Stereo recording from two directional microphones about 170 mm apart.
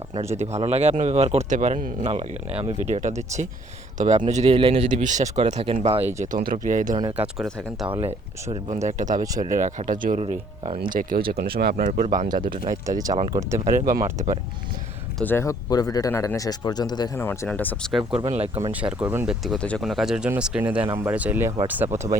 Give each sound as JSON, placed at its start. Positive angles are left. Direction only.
{"t": 0.3, "sound": "speech", "side_deg": -40}
{"t": 6.3, "sound": "speech", "side_deg": -55}
{"t": 7.2, "sound": "speech", "side_deg": 0}
{"t": 7.9, "sound": "speech", "side_deg": -35}
{"t": 10.8, "sound": "speech", "side_deg": -55}
{"t": 12.3, "sound": "speech", "side_deg": -30}
{"t": 13.7, "sound": "speech", "side_deg": -50}
{"t": 15.2, "sound": "speech", "side_deg": 15}
{"t": 17.2, "sound": "speech", "side_deg": 15}
{"t": 18.3, "sound": "speech", "side_deg": -35}
{"t": 18.7, "sound": "speech", "side_deg": -10}